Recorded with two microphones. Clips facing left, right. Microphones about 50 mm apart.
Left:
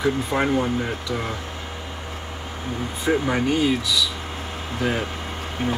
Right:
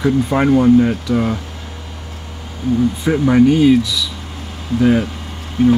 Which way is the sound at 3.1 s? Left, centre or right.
Centre.